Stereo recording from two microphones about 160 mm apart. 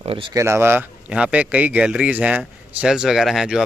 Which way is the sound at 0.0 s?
35° right (ahead or behind).